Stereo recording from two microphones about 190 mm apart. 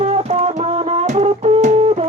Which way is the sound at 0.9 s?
35° right (ahead or behind).